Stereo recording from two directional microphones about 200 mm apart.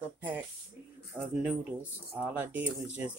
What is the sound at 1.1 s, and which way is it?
Speech, 5° right (ahead or behind).